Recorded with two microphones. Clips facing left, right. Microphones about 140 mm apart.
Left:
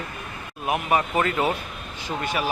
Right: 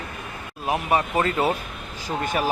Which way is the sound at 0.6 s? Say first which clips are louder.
Even; 30° right (ahead or behind).